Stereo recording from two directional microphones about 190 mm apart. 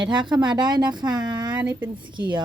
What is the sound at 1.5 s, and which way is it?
Speech, 10° right (ahead or behind).